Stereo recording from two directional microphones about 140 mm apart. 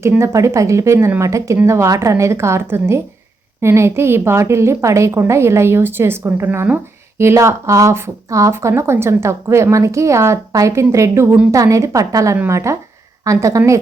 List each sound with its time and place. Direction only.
0.0 s a woman's voice: 20° right (ahead or behind)